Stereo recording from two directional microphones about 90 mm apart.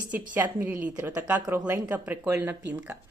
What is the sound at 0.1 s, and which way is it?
A woman's voice, 20° right (ahead or behind).